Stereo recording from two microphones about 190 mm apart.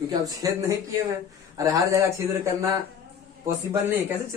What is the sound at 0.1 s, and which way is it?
Speech, 20° right (ahead or behind).